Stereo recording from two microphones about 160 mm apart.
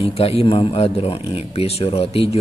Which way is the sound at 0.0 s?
40° left (ahead or behind).